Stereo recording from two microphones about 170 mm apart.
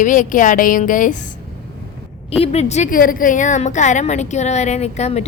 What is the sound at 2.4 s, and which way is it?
A woman's voice, 40° left (ahead or behind).